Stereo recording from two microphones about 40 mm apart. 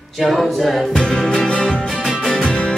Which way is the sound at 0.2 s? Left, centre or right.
Centre.